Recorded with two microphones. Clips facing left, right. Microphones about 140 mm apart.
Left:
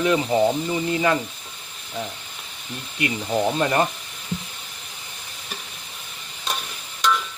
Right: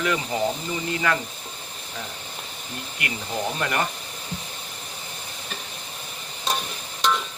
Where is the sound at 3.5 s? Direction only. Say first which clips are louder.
Left 3 dB; 25° left (ahead or behind).